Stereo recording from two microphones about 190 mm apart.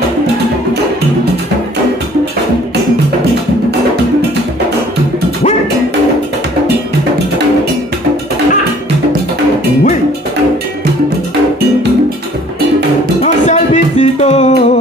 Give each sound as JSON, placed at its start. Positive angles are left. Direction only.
{"t": 13.2, "sound": "music", "side_deg": 35}